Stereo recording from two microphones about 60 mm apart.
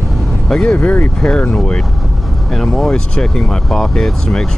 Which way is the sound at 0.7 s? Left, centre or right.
Left.